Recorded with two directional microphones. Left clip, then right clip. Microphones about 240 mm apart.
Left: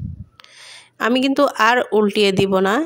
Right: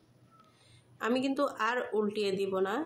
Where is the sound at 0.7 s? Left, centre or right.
Left.